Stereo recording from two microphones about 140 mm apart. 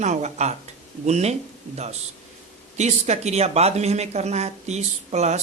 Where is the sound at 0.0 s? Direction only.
55° right (ahead or behind).